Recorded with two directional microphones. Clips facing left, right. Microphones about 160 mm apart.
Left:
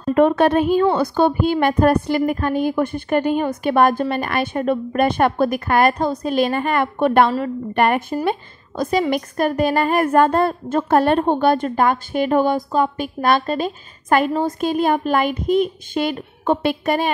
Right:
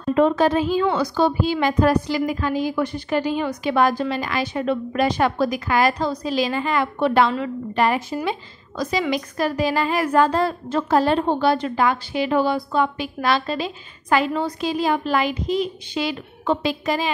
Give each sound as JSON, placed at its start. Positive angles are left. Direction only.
{"t": 0.1, "sound": "a woman's voice", "side_deg": 60}